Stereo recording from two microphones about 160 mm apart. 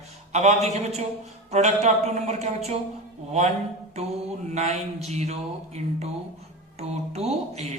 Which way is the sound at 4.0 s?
40° right (ahead or behind).